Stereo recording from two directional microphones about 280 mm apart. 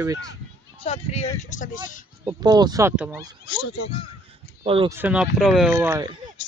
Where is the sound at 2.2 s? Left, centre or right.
Centre.